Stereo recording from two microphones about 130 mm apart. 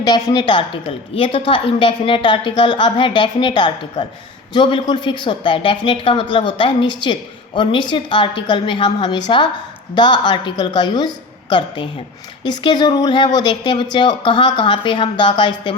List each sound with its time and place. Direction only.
0.0 s a woman's voice: 30° left (ahead or behind)